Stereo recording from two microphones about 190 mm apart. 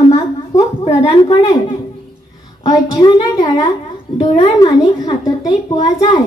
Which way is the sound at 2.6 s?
20° left (ahead or behind).